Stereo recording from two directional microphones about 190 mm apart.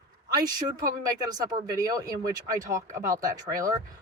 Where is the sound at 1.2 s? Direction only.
20° right (ahead or behind).